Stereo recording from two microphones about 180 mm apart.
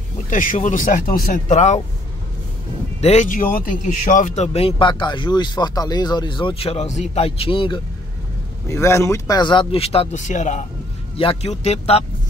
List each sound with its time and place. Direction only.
0.3 s speech: 50° left (ahead or behind)
3.0 s speech: 40° left (ahead or behind)
8.6 s speech: 15° left (ahead or behind); by 12.0 s 35° left (ahead or behind)